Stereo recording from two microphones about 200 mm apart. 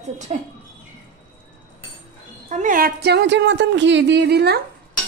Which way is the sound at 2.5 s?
40° right (ahead or behind).